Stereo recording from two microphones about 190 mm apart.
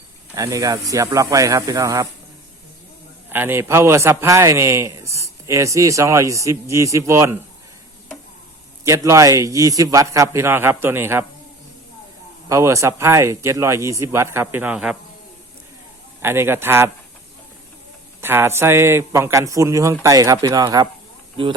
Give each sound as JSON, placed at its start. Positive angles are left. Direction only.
{"t": 0.3, "sound": "a man's voice", "side_deg": -15}
{"t": 3.2, "sound": "a man's voice", "side_deg": -10}
{"t": 8.8, "sound": "a man's voice", "side_deg": -15}
{"t": 12.5, "sound": "a man's voice", "side_deg": -15}
{"t": 16.2, "sound": "a man's voice", "side_deg": -10}
{"t": 18.2, "sound": "a man's voice", "side_deg": -10}